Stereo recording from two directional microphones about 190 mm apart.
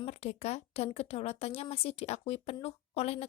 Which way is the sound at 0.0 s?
35° left (ahead or behind).